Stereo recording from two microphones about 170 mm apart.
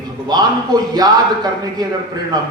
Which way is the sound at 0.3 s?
25° right (ahead or behind).